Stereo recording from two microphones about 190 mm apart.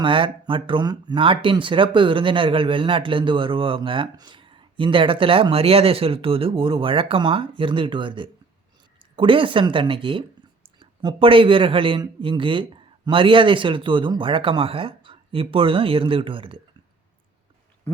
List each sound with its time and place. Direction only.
0.0 s speech: 25° right (ahead or behind)